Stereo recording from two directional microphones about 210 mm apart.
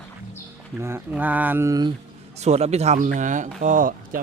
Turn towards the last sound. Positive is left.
turn(degrees=-40)  # may be behind; listen again after turning